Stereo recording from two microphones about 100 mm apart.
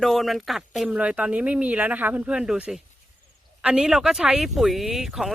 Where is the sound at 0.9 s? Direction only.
15° right (ahead or behind).